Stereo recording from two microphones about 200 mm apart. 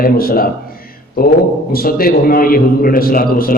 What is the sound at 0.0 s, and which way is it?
A man's voice, 45° left (ahead or behind).